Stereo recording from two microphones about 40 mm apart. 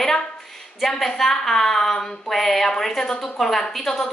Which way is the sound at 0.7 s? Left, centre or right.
Centre.